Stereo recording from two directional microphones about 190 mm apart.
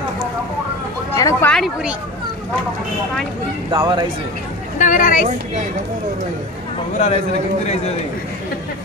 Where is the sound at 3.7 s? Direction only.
25° right (ahead or behind).